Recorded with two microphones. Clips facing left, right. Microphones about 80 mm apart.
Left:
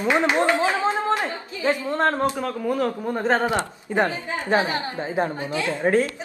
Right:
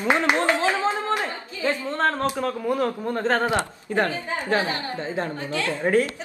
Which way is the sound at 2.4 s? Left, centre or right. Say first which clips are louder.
Even; centre.